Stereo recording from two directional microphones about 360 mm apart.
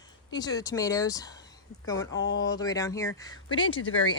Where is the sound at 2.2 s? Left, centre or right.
Left.